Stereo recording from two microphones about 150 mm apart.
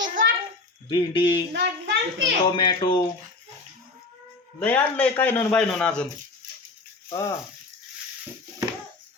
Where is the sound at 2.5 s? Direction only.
30° left (ahead or behind).